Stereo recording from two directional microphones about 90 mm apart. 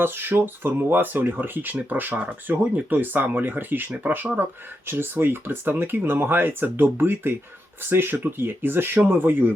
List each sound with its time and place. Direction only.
0.0 s speech: 25° right (ahead or behind)